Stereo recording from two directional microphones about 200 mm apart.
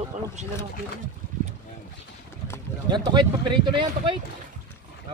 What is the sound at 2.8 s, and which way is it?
Speech, 20° right (ahead or behind).